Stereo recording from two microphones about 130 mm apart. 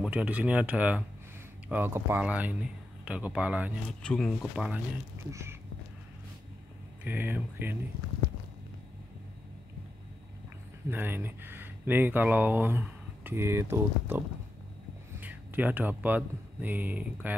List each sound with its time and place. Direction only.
0.0 s speech: 10° right (ahead or behind)
4.0 s speech: 5° left (ahead or behind)
4.4 s speech: 5° right (ahead or behind)
5.3 s a sound: 20° right (ahead or behind)
7.1 s speech: 15° right (ahead or behind)
10.9 s speech: 15° right (ahead or behind)